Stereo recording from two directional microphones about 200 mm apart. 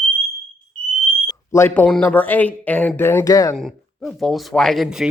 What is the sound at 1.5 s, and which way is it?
Speech, 10° left (ahead or behind).